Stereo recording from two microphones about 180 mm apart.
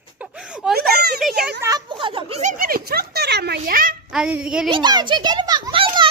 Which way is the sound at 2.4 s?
50° right (ahead or behind).